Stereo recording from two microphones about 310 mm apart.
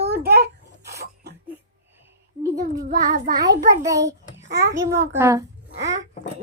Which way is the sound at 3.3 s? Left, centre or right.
Centre.